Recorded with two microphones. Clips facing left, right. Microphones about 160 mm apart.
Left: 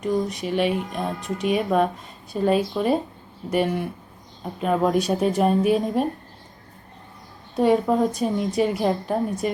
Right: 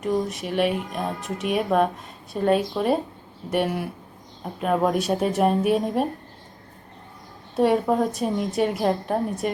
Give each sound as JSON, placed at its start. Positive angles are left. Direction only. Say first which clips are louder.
{"t": 0.0, "sound": "a woman's voice", "louder": "left 1 dB", "side_deg": 0}
{"t": 7.5, "sound": "a woman's voice", "louder": "left 1 dB", "side_deg": 0}